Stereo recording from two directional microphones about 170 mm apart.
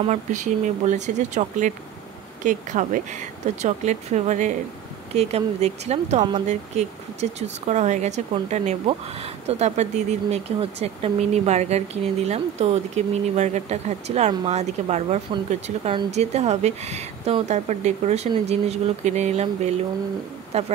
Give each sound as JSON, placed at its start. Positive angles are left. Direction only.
{"t": 0.1, "sound": "speech", "side_deg": -45}